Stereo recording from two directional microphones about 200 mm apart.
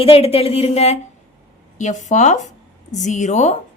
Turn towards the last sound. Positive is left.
turn(degrees=35)  # may be behind; listen again after turning